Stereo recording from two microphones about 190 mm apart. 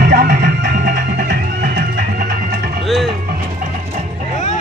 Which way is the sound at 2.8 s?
Centre (ahead or behind).